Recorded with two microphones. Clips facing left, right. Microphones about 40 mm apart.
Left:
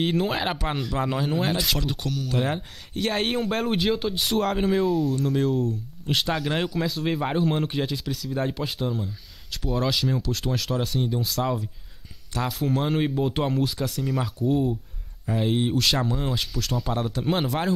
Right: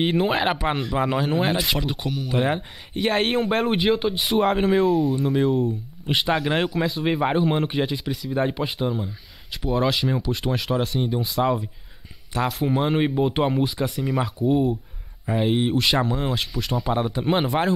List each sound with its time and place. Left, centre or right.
0.0 s speech: centre